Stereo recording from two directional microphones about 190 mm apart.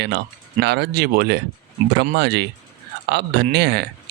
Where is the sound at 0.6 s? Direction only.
60° right (ahead or behind).